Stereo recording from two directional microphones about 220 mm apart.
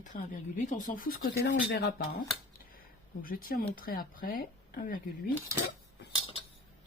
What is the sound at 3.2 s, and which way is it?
Speech, 40° left (ahead or behind).